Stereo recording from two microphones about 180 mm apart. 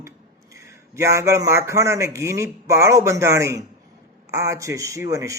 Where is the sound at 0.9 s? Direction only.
15° right (ahead or behind).